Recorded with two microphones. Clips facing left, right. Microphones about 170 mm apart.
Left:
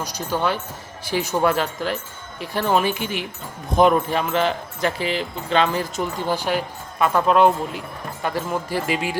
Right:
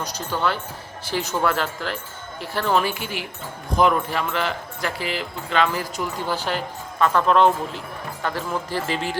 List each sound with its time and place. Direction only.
0.0 s speech: 15° left (ahead or behind)
6.3 s speech: 15° left (ahead or behind)